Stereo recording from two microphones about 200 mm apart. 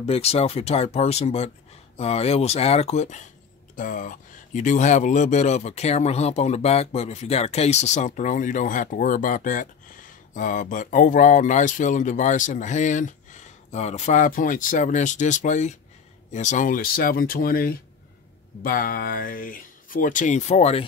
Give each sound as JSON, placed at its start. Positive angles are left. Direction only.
{"t": 0.0, "sound": "speech", "side_deg": 30}